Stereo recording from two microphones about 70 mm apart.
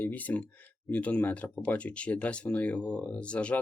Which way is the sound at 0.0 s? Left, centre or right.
Left.